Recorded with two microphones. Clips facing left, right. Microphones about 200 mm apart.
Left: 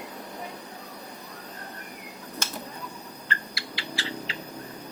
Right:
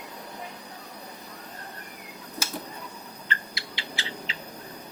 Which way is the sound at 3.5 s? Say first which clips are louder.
Left 2 dB; 20° right (ahead or behind).